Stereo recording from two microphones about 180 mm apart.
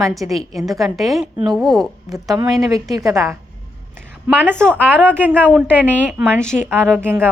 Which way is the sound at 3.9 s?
10° right (ahead or behind).